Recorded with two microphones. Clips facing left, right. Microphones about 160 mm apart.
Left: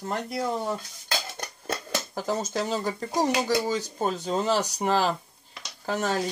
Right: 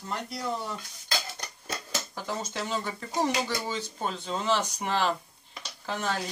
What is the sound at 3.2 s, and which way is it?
Speech, 40° left (ahead or behind).